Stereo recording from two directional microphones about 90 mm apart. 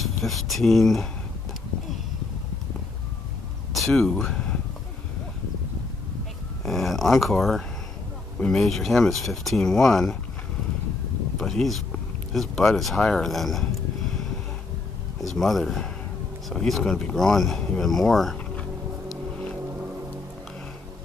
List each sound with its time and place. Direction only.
0.0 s speech: centre (ahead or behind)
3.7 s speech: 5° left (ahead or behind)
6.6 s speech: centre (ahead or behind)
11.3 s speech: 5° left (ahead or behind)